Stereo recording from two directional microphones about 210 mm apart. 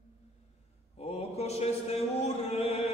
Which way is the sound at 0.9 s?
30° left (ahead or behind).